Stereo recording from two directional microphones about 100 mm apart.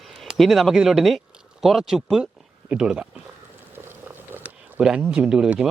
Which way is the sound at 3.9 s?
20° right (ahead or behind).